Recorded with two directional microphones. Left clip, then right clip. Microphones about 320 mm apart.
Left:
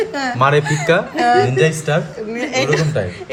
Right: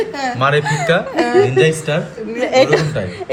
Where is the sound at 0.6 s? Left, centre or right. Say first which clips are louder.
Even; centre.